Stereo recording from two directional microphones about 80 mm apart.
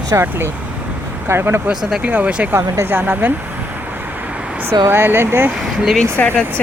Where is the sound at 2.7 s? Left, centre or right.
Right.